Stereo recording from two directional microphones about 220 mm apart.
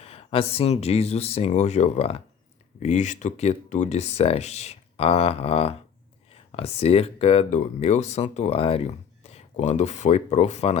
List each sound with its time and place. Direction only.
0.0 s speech: 25° left (ahead or behind)